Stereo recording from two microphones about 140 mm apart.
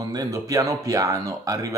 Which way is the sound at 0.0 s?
25° right (ahead or behind).